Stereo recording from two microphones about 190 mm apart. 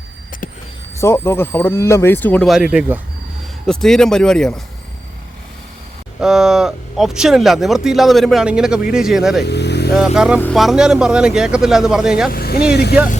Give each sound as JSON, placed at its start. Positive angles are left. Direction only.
{"t": 0.9, "sound": "speech", "side_deg": 15}
{"t": 2.5, "sound": "speech", "side_deg": -5}
{"t": 6.1, "sound": "speech", "side_deg": 0}
{"t": 9.4, "sound": "speech", "side_deg": 60}
{"t": 10.2, "sound": "speech", "side_deg": -5}
{"t": 12.3, "sound": "speech", "side_deg": 55}